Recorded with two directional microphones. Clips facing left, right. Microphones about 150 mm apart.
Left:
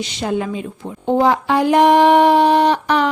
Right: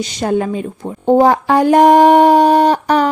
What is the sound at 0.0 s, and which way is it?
A woman's voice, 45° right (ahead or behind).